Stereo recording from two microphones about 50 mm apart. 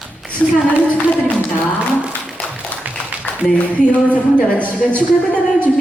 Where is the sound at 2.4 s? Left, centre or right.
Centre.